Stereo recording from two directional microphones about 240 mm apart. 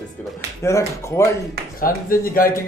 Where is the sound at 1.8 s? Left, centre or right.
Left.